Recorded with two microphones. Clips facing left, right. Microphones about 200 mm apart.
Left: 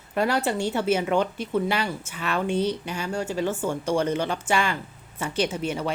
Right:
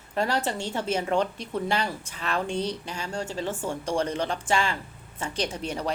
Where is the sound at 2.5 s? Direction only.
5° left (ahead or behind).